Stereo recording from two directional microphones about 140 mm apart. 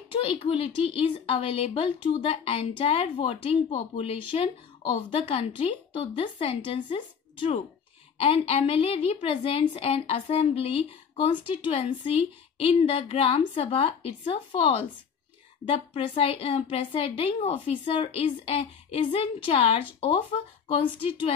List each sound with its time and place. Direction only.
0.2 s a woman's voice: 40° left (ahead or behind)